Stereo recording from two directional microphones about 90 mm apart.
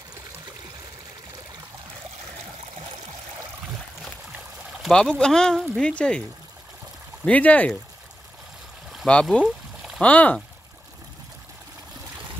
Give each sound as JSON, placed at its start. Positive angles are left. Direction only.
{"t": 4.8, "sound": "speech", "side_deg": 0}
{"t": 7.2, "sound": "speech", "side_deg": 15}
{"t": 9.0, "sound": "speech", "side_deg": 10}
{"t": 9.4, "sound": "a sound", "side_deg": -5}
{"t": 10.0, "sound": "speech", "side_deg": 15}